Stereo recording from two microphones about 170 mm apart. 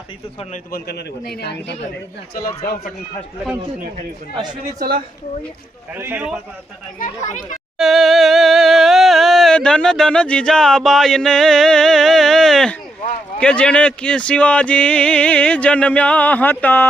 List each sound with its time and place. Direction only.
0.5 s a man's voice: 65° left (ahead or behind)
5.9 s a man's voice: 10° right (ahead or behind)
7.0 s speech: 45° left (ahead or behind)
7.8 s music: centre (ahead or behind)
13.4 s speech: 5° left (ahead or behind)